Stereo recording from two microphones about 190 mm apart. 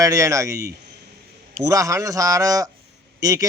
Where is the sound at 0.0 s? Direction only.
15° right (ahead or behind).